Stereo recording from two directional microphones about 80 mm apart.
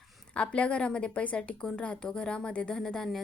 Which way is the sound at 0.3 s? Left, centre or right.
Centre.